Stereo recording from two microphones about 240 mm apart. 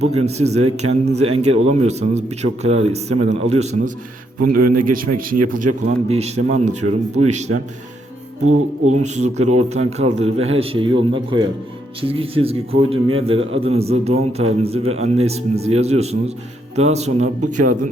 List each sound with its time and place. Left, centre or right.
0.2 s a man's voice: right
4.4 s a man's voice: right
5.5 s a man's voice: right
8.9 s a man's voice: right